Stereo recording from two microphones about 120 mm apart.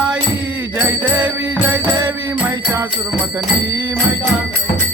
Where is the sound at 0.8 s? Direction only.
15° right (ahead or behind).